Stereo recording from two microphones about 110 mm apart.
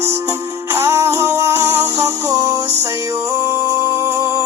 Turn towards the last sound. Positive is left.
turn(degrees=-25)  # may be behind; listen again after turning